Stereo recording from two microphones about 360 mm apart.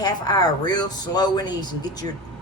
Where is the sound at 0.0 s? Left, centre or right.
Centre.